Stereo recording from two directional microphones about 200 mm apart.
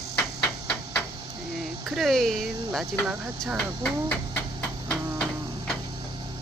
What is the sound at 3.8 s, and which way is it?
Speech, 10° left (ahead or behind).